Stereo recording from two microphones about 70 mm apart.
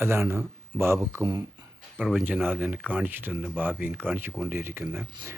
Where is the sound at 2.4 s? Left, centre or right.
Right.